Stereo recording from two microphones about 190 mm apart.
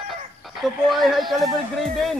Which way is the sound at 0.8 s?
Centre (ahead or behind).